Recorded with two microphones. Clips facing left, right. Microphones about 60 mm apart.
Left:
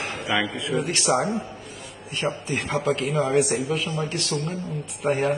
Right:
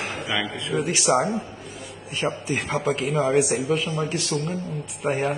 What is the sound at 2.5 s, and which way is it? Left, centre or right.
A man's voice, centre.